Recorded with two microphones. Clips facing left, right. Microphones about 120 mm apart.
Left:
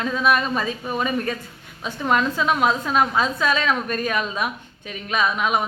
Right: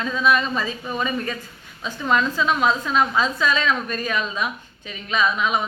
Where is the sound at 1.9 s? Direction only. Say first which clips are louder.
Even; 55° left (ahead or behind).